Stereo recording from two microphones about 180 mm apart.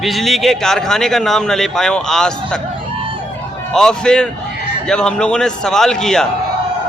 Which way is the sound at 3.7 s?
5° left (ahead or behind).